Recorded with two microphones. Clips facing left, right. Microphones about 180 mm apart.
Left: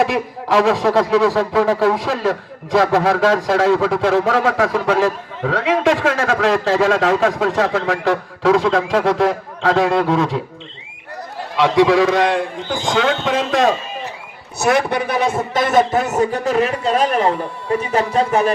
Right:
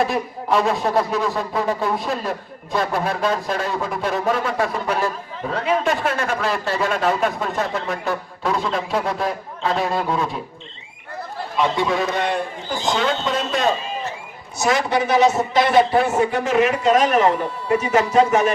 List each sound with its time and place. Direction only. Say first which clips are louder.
0.0 s a man's voice: left 3 dB; 90° left
11.5 s a man's voice: left 7 dB; 90° left
14.6 s a man's voice: left 3 dB; 60° left (ahead or behind); by 18.5 s 35° left (ahead or behind)